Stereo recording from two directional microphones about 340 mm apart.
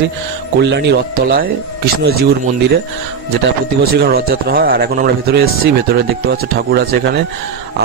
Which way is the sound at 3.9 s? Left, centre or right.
Right.